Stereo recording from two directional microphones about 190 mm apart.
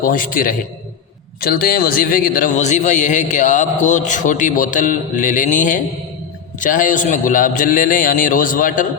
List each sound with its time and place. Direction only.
0.0 s a man's voice: 45° left (ahead or behind)